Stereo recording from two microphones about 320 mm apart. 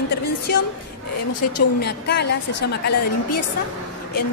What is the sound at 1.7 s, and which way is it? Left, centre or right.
A woman's voice, left.